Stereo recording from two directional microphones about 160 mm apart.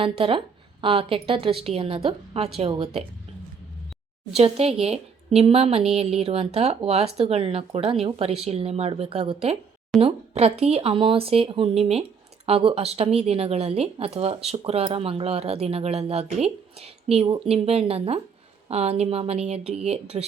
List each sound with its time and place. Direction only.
0.0 s speech: 35° right (ahead or behind)
4.4 s speech: 40° right (ahead or behind)